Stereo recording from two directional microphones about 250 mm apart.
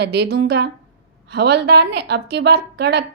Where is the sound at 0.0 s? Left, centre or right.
Right.